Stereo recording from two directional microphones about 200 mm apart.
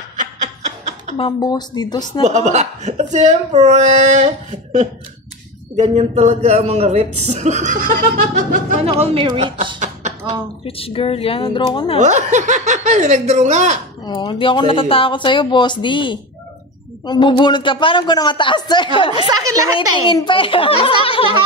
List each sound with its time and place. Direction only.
0.2 s music: 35° right (ahead or behind)
1.1 s speech: 25° left (ahead or behind)
2.4 s a man's voice: 35° right (ahead or behind)
8.8 s a woman's voice: 30° right (ahead or behind)
10.6 s speech: 25° left (ahead or behind)
12.0 s a man's voice: 35° right (ahead or behind)
14.0 s speech: 20° left (ahead or behind)
19.2 s a woman's voice: 15° right (ahead or behind)
20.1 s speech: 25° left (ahead or behind)